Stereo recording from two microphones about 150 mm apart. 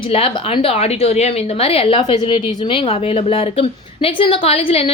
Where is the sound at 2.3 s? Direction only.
35° left (ahead or behind).